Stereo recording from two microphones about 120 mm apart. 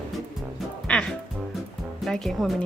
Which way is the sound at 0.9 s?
5° left (ahead or behind).